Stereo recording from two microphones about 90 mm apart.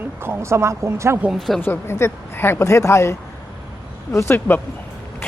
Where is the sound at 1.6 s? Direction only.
25° left (ahead or behind).